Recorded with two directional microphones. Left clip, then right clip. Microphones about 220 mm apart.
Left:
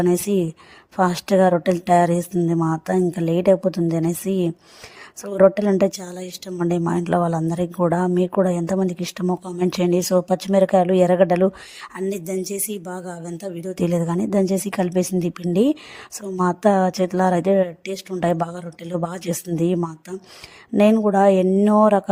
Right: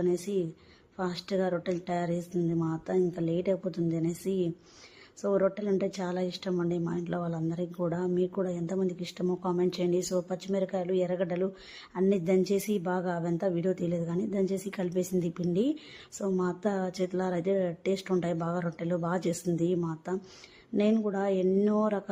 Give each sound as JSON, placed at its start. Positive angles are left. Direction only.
{"t": 0.0, "sound": "a woman's voice", "side_deg": 45}
{"t": 12.8, "sound": "a woman's voice", "side_deg": 0}
{"t": 13.7, "sound": "a woman's voice", "side_deg": 45}